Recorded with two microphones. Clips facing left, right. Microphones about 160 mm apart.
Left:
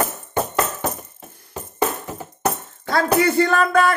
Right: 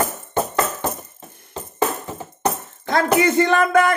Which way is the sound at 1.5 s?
10° left (ahead or behind).